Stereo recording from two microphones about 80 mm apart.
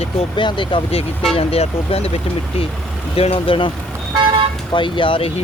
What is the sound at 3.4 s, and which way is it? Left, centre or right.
Speech, left.